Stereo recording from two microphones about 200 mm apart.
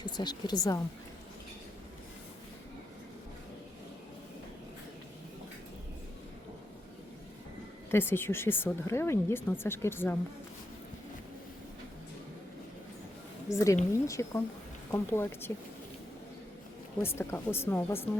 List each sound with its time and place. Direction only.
0.0 s speech: 20° left (ahead or behind)
7.9 s speech: 10° left (ahead or behind)
13.5 s speech: 15° left (ahead or behind)
17.0 s speech: 10° left (ahead or behind)